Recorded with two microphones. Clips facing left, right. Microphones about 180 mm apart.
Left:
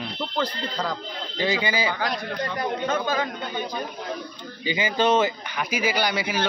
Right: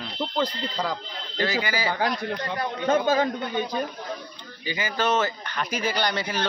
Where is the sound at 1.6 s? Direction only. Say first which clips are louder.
Left 2 dB; 20° left (ahead or behind).